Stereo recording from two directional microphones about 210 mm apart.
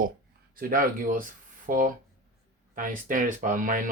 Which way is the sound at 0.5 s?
45° right (ahead or behind).